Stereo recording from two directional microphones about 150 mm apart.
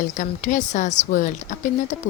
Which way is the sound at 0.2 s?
60° left (ahead or behind).